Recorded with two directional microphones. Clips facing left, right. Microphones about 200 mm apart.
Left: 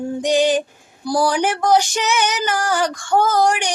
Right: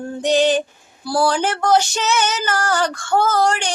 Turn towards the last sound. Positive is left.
turn(degrees=15)  # may be behind; listen again after turning